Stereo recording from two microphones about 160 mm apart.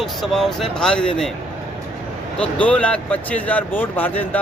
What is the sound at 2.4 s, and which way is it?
Speech, 10° left (ahead or behind).